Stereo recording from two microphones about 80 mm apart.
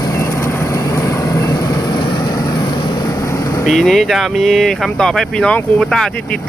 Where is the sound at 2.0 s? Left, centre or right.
Left.